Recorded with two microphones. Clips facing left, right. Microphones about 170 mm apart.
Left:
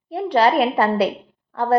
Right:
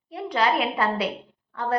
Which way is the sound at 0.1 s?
35° left (ahead or behind).